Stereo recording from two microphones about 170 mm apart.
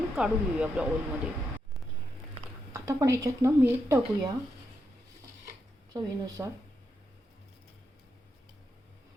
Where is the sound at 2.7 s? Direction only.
20° right (ahead or behind).